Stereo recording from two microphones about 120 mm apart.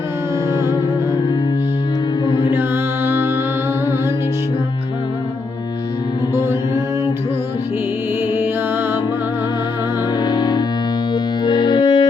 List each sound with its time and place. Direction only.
2.2 s music: 35° left (ahead or behind)
2.6 s music: 20° right (ahead or behind)
6.3 s music: 25° right (ahead or behind)
10.2 s music: 35° left (ahead or behind)